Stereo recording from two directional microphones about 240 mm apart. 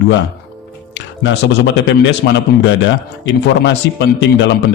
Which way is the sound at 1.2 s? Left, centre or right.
Left.